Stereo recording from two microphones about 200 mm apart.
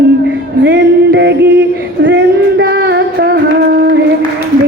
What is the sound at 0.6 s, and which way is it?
Female singing, 65° right (ahead or behind).